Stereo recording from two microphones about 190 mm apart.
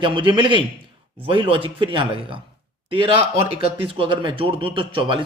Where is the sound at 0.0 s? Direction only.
25° right (ahead or behind).